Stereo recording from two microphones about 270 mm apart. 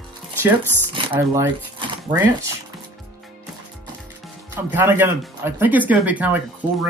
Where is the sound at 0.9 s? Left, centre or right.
Centre.